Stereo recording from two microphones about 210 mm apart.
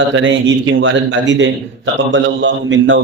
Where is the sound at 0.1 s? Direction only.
60° right (ahead or behind).